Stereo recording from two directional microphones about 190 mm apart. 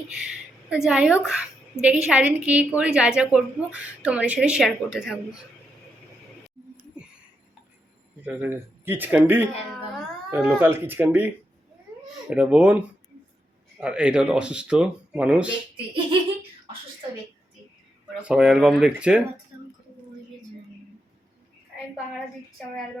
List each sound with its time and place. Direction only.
0.1 s a woman's voice: 5° right (ahead or behind)
8.2 s speech: 10° right (ahead or behind)
10.0 s a sound: centre (ahead or behind)
10.6 s speech: 10° right (ahead or behind)
12.3 s a woman's voice: 5° right (ahead or behind)
13.8 s a woman's voice: 5° right (ahead or behind)
18.2 s a woman's voice: 5° right (ahead or behind)